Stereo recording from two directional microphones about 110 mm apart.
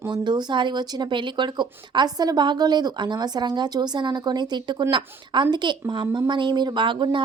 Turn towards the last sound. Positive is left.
turn(degrees=-45)  # may be behind; listen again after turning